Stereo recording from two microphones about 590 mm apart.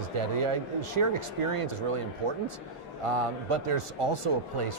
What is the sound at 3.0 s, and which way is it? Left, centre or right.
Speech, right.